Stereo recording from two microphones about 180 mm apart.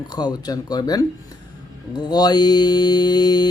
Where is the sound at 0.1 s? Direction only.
25° left (ahead or behind).